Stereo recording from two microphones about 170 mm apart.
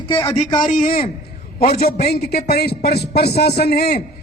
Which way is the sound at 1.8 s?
65° left (ahead or behind).